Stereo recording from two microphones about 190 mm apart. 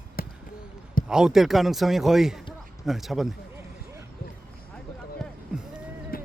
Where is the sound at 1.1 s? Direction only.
5° right (ahead or behind).